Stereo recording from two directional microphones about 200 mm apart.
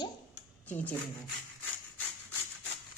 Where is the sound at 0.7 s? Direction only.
10° left (ahead or behind).